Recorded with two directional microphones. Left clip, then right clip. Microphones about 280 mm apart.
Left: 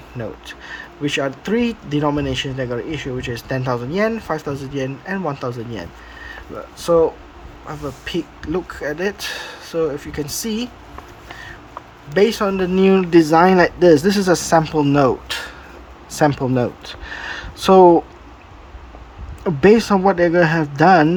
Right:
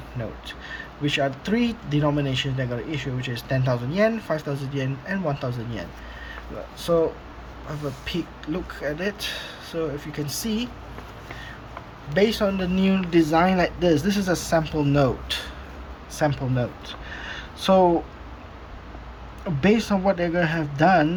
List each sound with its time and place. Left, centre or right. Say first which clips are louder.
0.2 s speech: left 5 dB; centre
12.1 s speech: left 5 dB; centre
19.6 s speech: left 8 dB; centre